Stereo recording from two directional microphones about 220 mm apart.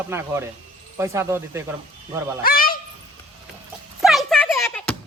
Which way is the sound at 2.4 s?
40° left (ahead or behind).